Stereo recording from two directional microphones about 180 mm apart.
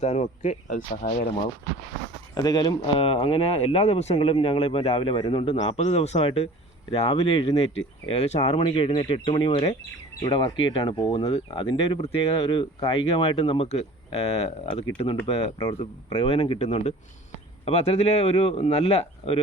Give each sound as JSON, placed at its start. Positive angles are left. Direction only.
{"t": 0.0, "sound": "speech", "side_deg": 40}
{"t": 2.3, "sound": "speech", "side_deg": 20}